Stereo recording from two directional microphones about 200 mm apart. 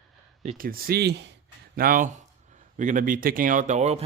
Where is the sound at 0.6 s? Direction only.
50° right (ahead or behind).